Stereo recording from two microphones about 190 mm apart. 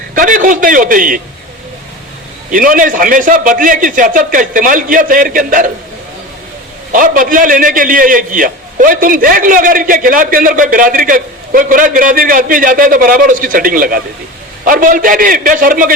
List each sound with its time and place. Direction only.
0.1 s a man's voice: 45° right (ahead or behind)
2.5 s a man's voice: 45° right (ahead or behind)
6.9 s a man's voice: 45° right (ahead or behind)